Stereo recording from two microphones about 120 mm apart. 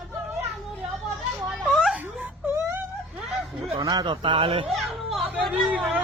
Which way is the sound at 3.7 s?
35° right (ahead or behind).